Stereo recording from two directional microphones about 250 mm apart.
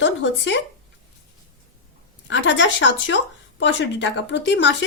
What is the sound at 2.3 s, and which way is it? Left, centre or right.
A woman's voice, left.